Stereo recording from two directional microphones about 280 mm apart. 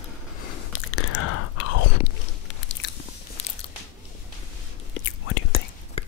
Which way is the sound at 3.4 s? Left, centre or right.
Left.